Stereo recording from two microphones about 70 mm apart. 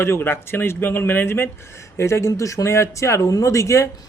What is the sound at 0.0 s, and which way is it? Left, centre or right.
Speech, left.